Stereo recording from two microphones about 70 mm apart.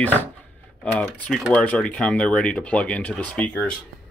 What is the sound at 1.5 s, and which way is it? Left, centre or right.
Speech, centre.